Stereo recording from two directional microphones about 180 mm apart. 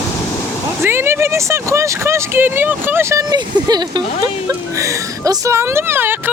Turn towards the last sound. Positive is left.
turn(degrees=-10)  # may be behind; listen again after turning